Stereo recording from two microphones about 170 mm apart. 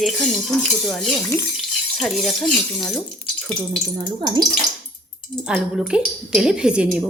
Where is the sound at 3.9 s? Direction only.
25° right (ahead or behind).